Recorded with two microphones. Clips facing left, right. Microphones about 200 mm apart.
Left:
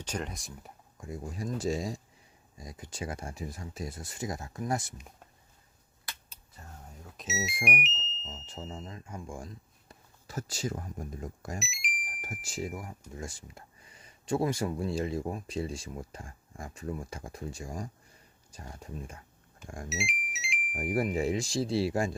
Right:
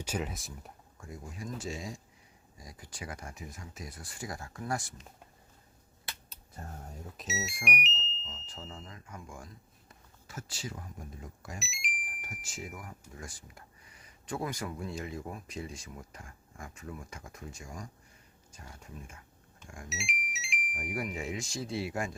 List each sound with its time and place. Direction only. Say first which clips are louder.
0.0 s speech: right 1 dB; 5° right (ahead or behind)
0.9 s speech: left 6 dB; 20° left (ahead or behind)
1.3 s speech: left 7 dB; 35° left (ahead or behind)
2.6 s speech: left 6 dB; 20° left (ahead or behind)
6.6 s speech: right 6 dB; 45° right (ahead or behind)
7.2 s speech: left 2 dB; 5° right (ahead or behind)
7.8 s alarm: left 1 dB; centre (ahead or behind)
8.2 s speech: left 4 dB; 40° left (ahead or behind)
8.4 s speech: left 5 dB; 20° left (ahead or behind); by 11.6 s 45° left (ahead or behind)
11.6 s alarm: left 2 dB; centre (ahead or behind)
12.0 s speech: left 5 dB; 40° left (ahead or behind)
19.9 s speech: left 4 dB; centre (ahead or behind)
20.7 s speech: left 8 dB; 40° left (ahead or behind)